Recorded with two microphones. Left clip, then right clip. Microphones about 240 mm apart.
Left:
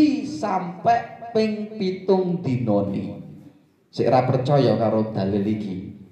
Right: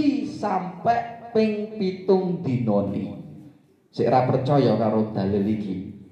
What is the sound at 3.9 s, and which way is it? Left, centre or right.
Speech, left.